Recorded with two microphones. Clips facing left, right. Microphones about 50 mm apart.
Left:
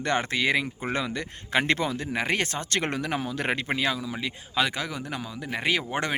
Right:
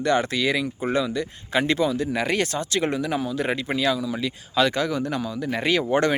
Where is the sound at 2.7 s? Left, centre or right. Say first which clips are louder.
Right 4 dB; left.